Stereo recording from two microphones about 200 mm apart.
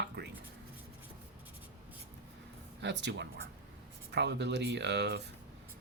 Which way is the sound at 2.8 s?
60° right (ahead or behind).